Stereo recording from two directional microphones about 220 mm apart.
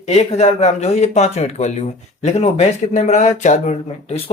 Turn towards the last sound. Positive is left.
turn(degrees=30)  # may be behind; listen again after turning